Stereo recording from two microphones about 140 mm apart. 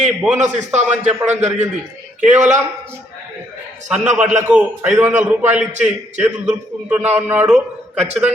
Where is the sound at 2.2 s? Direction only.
60° right (ahead or behind).